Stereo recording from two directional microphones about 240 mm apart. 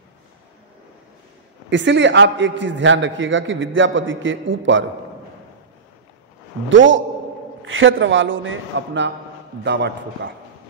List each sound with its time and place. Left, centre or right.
1.7 s a man's voice: right
6.7 s a man's voice: right